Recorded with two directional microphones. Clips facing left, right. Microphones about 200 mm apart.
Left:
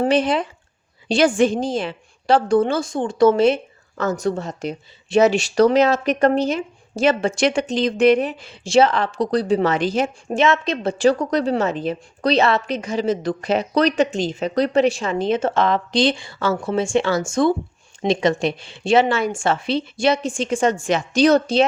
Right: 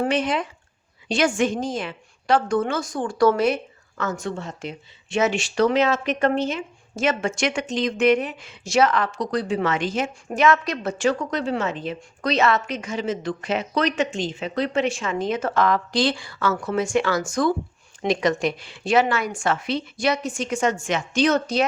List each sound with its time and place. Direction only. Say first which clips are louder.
0.0 s a woman's voice: left 4 dB; 30° left (ahead or behind)